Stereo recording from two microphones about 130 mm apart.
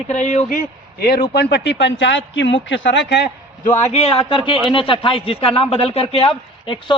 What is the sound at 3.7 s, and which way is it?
A man's voice, 55° left (ahead or behind).